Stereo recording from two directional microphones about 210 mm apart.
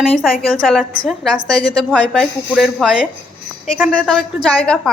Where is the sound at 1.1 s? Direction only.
Centre (ahead or behind).